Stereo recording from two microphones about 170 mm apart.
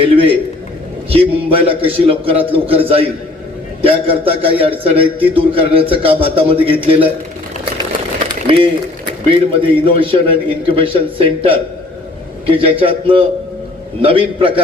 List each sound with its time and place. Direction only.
0.0 s a man's voice: 35° right (ahead or behind)
8.3 s a sound: 30° right (ahead or behind)
9.3 s a man's voice: 30° right (ahead or behind)